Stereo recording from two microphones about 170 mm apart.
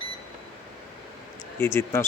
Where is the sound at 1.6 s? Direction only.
15° left (ahead or behind).